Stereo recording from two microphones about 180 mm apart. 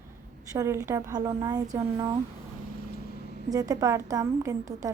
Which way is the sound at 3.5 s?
20° right (ahead or behind).